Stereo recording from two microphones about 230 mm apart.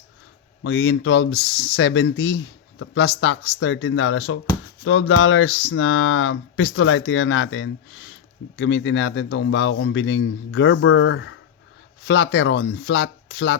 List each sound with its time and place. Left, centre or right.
0.6 s speech: left